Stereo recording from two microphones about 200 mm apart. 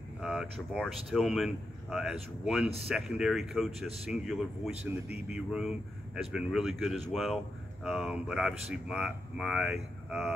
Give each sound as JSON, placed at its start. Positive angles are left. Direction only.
{"t": 0.2, "sound": "a man's voice", "side_deg": -5}